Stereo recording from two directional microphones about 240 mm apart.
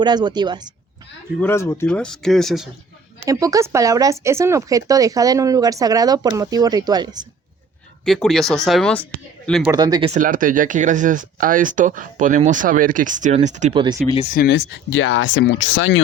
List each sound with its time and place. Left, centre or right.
0.0 s speech: centre
1.4 s speech: centre
3.2 s speech: centre
8.0 s speech: centre
9.7 s speech: centre
14.3 s speech: left